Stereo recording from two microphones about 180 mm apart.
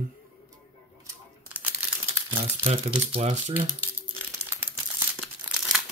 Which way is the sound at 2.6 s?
35° right (ahead or behind).